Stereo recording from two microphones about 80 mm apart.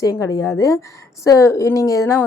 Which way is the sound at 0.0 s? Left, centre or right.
Left.